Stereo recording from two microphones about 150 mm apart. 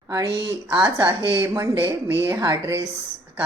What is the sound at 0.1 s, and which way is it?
Speech, 25° right (ahead or behind).